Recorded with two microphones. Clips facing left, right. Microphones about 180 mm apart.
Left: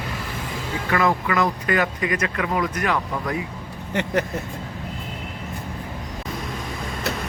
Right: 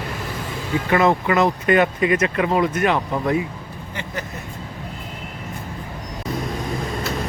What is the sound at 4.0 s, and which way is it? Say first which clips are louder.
Vehicle: left 8 dB; 70° left (ahead or behind).